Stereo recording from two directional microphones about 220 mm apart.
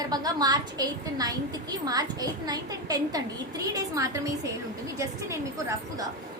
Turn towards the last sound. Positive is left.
turn(degrees=-15)  # may be behind; listen again after turning